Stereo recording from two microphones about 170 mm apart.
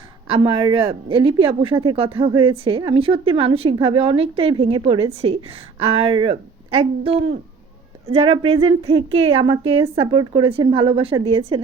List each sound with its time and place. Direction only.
0.3 s speech: 30° right (ahead or behind)